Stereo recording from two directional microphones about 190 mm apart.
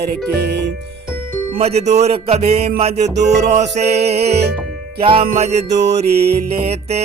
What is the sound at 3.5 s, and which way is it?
Music, 35° right (ahead or behind).